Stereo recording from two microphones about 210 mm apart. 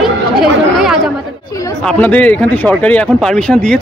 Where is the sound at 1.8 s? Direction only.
5° left (ahead or behind).